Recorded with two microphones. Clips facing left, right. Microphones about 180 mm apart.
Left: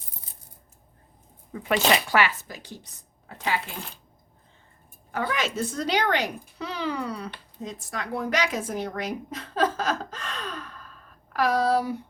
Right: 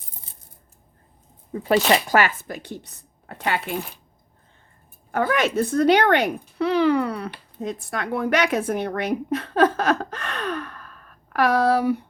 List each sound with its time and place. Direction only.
1.5 s speech: 35° right (ahead or behind); by 3.8 s 65° right (ahead or behind)
5.1 s a woman's voice: 55° right (ahead or behind)